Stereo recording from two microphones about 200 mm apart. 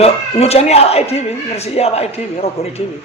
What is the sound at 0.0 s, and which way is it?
Speech, 30° left (ahead or behind).